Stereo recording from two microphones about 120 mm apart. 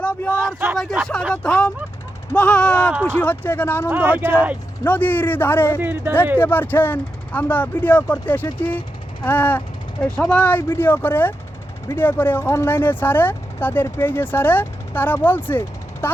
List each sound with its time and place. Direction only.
0.0 s a sound: 10° left (ahead or behind)
0.3 s a sound: 20° right (ahead or behind)
1.3 s speech: 5° left (ahead or behind)
3.8 s speech: 15° right (ahead or behind)
4.9 s speech: 15° left (ahead or behind)
5.8 s speech: 15° right (ahead or behind)
6.4 s speech: 15° left (ahead or behind)